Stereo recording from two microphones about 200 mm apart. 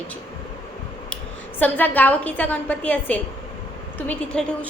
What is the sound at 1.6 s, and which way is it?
A woman's voice, 10° left (ahead or behind).